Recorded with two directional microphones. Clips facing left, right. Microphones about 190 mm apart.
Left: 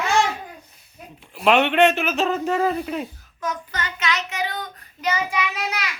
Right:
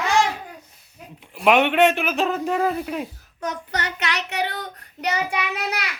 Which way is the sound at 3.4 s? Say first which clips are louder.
Right 1 dB; 65° right (ahead or behind).